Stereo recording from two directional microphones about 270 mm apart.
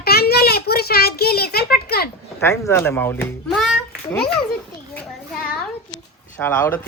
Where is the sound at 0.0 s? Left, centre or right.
Left.